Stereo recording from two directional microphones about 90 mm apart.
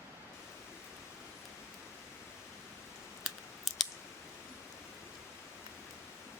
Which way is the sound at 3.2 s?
5° left (ahead or behind).